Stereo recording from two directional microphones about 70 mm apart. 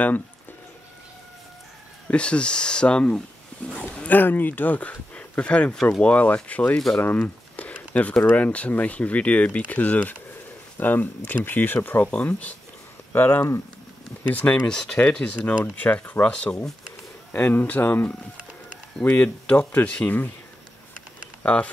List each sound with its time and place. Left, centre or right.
2.0 s speech: centre
14.7 s speech: centre
15.6 s speech: left
17.3 s speech: left
21.4 s speech: centre